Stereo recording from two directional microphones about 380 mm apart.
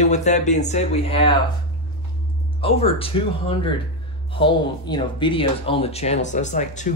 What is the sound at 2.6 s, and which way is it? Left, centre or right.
Speech, centre.